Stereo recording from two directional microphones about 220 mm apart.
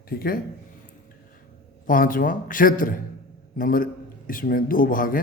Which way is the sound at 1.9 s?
40° left (ahead or behind).